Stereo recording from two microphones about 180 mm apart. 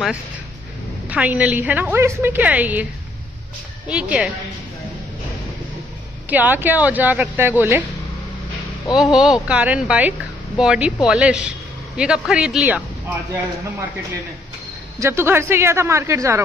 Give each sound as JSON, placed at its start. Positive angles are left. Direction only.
{"t": 1.0, "sound": "a woman's voice", "side_deg": -10}
{"t": 6.2, "sound": "a woman's voice", "side_deg": -10}
{"t": 8.9, "sound": "a woman's voice", "side_deg": 0}
{"t": 15.0, "sound": "a woman's voice", "side_deg": -15}